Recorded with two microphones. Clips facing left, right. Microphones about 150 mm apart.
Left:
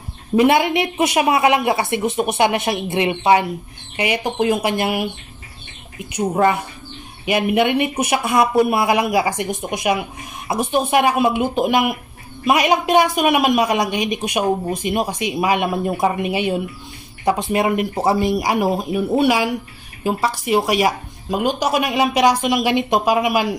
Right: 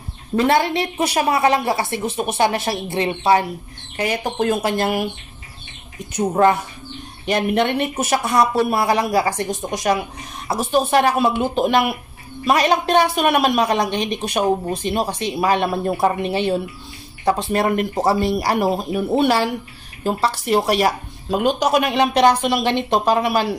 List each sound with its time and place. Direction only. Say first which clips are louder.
0.4 s speech: left 2 dB; 15° left (ahead or behind)
6.3 s speech: right 2 dB; 5° left (ahead or behind)